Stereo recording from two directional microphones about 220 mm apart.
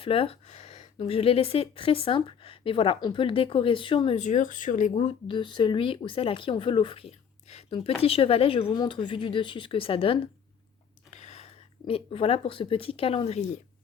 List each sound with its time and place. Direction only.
0.0 s speech: 25° left (ahead or behind)
11.1 s a sound: 30° left (ahead or behind)
11.9 s speech: 25° left (ahead or behind)